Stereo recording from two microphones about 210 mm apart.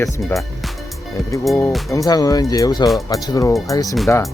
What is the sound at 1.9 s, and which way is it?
Speech, 15° left (ahead or behind).